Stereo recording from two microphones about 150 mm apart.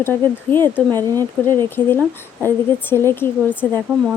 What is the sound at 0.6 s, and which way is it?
Speech, 25° right (ahead or behind).